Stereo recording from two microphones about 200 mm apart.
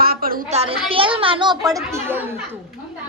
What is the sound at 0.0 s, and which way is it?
Child singing, 50° right (ahead or behind).